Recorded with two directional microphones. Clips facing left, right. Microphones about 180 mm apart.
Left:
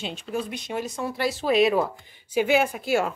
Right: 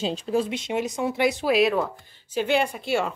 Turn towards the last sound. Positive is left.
turn(degrees=5)  # may be behind; listen again after turning